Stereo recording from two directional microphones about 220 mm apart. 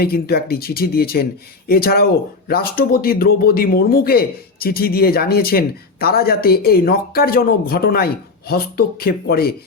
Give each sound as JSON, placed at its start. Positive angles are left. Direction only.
{"t": 0.0, "sound": "speech", "side_deg": 45}